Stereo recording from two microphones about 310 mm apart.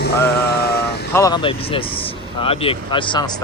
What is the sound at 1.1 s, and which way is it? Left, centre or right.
Speech, centre.